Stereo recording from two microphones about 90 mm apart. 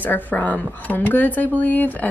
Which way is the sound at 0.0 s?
20° left (ahead or behind).